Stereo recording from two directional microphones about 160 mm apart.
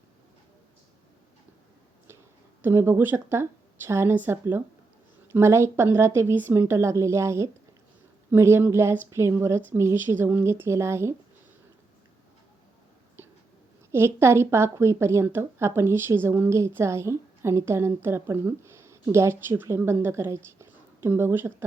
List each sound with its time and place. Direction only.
2.6 s a woman's voice: 15° right (ahead or behind)
13.9 s a woman's voice: 15° right (ahead or behind)